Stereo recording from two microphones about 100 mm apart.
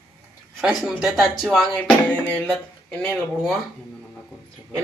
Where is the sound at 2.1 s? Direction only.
15° left (ahead or behind).